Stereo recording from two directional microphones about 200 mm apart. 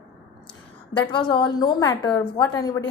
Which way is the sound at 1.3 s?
20° left (ahead or behind).